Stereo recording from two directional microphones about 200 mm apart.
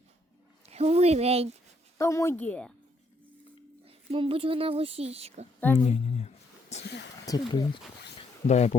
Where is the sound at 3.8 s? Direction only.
30° right (ahead or behind).